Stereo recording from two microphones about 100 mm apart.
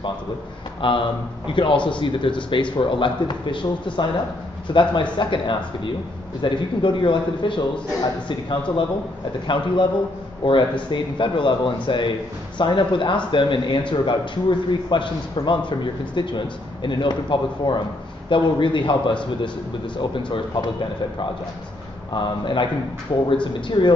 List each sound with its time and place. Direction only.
0.7 s a man's voice: 55° left (ahead or behind)
10.4 s a man's voice: 55° left (ahead or behind)
22.1 s a man's voice: 50° left (ahead or behind)